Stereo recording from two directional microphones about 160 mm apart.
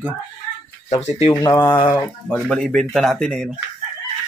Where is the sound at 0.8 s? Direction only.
40° left (ahead or behind).